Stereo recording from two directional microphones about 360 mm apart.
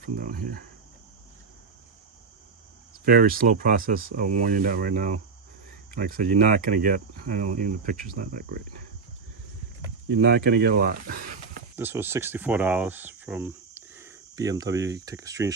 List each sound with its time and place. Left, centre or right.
0.0 s speech: right
3.0 s speech: right
10.1 s speech: right
11.8 s speech: centre